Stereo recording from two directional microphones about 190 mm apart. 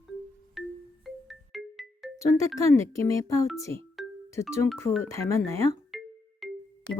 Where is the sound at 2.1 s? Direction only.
15° left (ahead or behind).